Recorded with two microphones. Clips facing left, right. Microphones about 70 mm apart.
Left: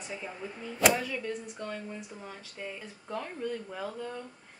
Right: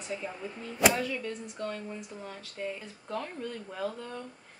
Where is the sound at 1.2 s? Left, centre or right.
Centre.